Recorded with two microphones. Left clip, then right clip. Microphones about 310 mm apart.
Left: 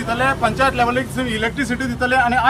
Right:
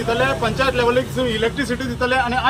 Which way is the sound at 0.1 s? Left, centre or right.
Centre.